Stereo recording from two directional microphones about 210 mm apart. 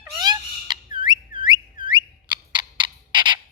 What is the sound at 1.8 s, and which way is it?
Owl, 20° right (ahead or behind).